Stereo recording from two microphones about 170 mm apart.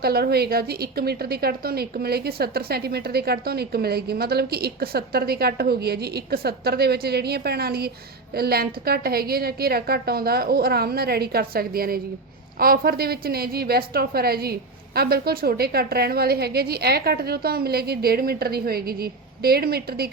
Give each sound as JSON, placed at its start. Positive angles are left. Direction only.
{"t": 0.0, "sound": "a woman's voice", "side_deg": -65}